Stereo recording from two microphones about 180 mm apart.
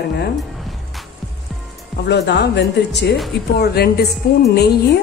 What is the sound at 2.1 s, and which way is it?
A woman's voice, 70° left (ahead or behind).